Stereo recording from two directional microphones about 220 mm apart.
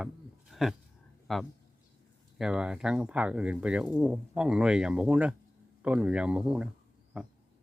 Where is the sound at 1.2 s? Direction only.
Centre (ahead or behind).